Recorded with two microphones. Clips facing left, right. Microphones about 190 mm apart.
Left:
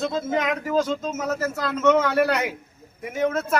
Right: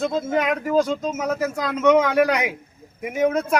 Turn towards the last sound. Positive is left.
turn(degrees=-15)  # may be behind; listen again after turning